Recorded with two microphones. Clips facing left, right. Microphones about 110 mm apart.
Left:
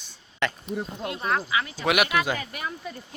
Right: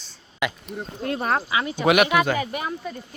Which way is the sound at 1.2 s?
40° right (ahead or behind).